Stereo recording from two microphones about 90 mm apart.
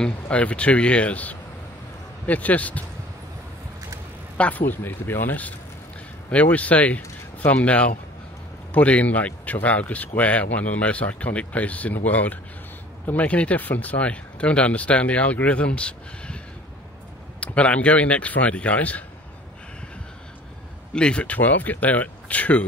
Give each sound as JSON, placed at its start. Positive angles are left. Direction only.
{"t": 0.0, "sound": "speech", "side_deg": 15}
{"t": 4.4, "sound": "speech", "side_deg": 15}
{"t": 17.4, "sound": "speech", "side_deg": 15}
{"t": 20.9, "sound": "speech", "side_deg": 10}